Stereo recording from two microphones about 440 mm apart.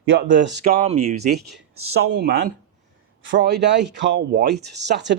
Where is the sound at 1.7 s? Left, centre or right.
Right.